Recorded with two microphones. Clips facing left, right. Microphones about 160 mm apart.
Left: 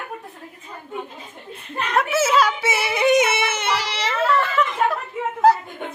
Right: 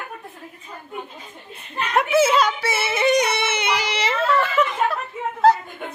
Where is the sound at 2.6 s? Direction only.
15° left (ahead or behind).